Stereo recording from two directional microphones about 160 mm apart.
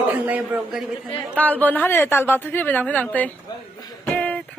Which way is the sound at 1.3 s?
10° left (ahead or behind).